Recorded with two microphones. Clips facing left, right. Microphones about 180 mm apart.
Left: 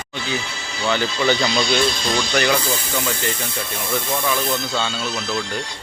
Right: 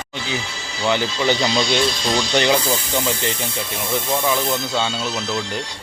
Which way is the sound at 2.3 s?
25° right (ahead or behind).